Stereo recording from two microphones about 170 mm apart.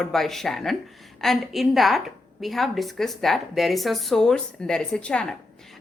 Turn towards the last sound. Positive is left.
turn(degrees=5)  # may be behind; listen again after turning